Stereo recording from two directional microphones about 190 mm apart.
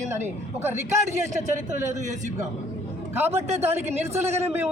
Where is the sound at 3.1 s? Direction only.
10° right (ahead or behind).